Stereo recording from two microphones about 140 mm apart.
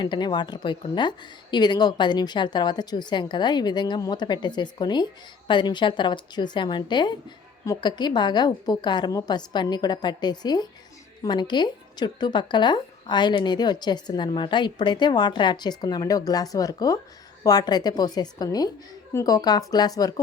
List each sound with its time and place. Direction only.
0.0 s a woman's voice: 30° left (ahead or behind)